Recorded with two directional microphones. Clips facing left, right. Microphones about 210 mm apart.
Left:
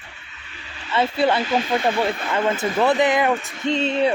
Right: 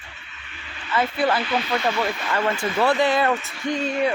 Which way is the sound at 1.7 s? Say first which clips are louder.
Left 2 dB; 25° left (ahead or behind).